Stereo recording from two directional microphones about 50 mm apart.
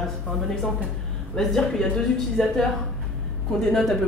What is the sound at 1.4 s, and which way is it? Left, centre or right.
Speech, centre.